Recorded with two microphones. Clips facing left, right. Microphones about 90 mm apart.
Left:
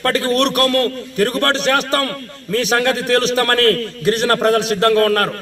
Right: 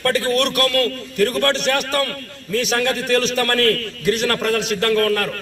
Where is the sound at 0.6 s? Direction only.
30° left (ahead or behind).